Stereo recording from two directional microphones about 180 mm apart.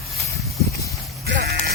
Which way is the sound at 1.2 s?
60° right (ahead or behind).